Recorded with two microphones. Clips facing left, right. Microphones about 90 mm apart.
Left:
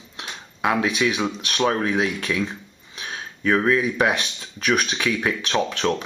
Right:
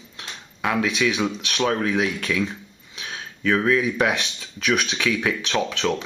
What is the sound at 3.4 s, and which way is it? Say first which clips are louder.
Speech: left 1 dB; 15° left (ahead or behind).